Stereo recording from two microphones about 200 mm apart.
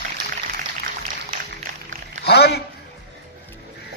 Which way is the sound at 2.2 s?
55° left (ahead or behind).